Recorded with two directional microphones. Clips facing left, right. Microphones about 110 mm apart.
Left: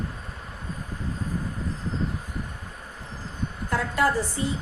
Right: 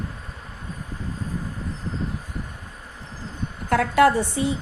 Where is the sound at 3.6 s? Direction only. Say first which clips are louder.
Right 7 dB; 75° right (ahead or behind).